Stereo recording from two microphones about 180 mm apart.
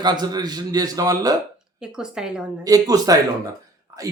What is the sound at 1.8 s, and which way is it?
Speech, 5° right (ahead or behind).